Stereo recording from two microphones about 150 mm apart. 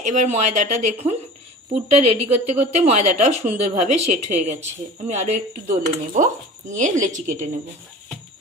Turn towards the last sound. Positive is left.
turn(degrees=-55)  # may be behind; listen again after turning